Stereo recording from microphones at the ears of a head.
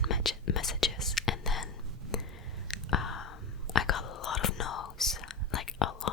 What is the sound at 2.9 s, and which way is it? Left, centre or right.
Whispering, left.